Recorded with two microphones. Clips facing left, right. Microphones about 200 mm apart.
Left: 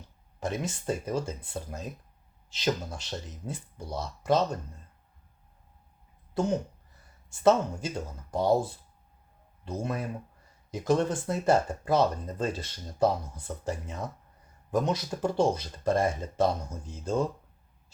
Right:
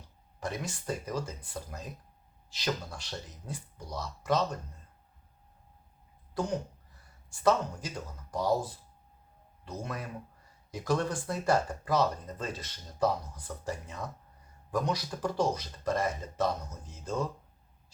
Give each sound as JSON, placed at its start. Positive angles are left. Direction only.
{"t": 0.3, "sound": "speech", "side_deg": 20}
{"t": 6.4, "sound": "speech", "side_deg": 25}